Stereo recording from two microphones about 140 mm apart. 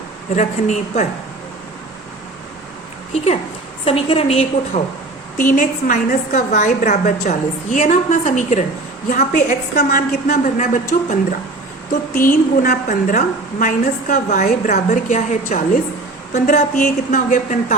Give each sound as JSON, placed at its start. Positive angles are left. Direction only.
{"t": 0.3, "sound": "a woman's voice", "side_deg": 60}
{"t": 3.8, "sound": "a woman's voice", "side_deg": 45}
{"t": 5.4, "sound": "a woman's voice", "side_deg": 70}
{"t": 11.9, "sound": "a woman's voice", "side_deg": 75}